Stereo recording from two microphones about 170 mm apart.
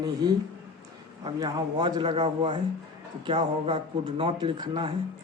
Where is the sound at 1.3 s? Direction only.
25° right (ahead or behind).